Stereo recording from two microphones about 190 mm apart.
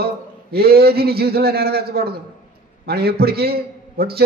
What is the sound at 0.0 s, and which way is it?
Speech, 55° right (ahead or behind).